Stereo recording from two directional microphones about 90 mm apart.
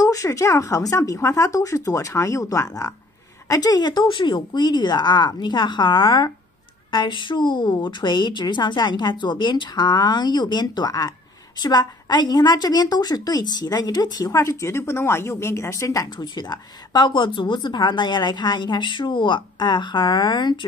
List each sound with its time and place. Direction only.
0.0 s a woman's voice: 35° left (ahead or behind); by 20.5 s 55° left (ahead or behind)